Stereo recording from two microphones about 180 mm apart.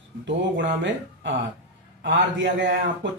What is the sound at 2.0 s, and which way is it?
Speech, 75° right (ahead or behind).